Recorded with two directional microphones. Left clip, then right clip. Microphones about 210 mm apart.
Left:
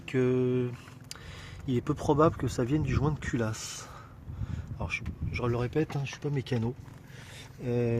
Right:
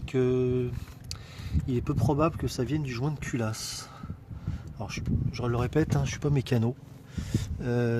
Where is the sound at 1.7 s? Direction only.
Centre (ahead or behind).